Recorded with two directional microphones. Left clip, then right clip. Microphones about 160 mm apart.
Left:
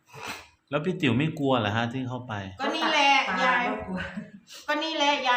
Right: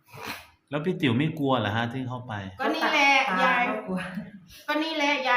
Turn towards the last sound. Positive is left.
turn(degrees=10)  # may be behind; listen again after turning